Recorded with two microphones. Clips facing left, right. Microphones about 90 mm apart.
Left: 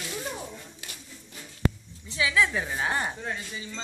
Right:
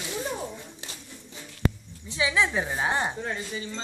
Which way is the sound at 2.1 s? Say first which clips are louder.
Even; 25° right (ahead or behind).